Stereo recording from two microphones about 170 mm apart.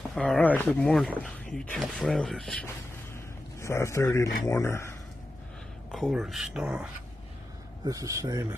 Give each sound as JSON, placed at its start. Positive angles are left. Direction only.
{"t": 0.1, "sound": "speech", "side_deg": 5}
{"t": 3.6, "sound": "a man's voice", "side_deg": 15}
{"t": 5.9, "sound": "speech", "side_deg": 0}
{"t": 7.8, "sound": "speech", "side_deg": -20}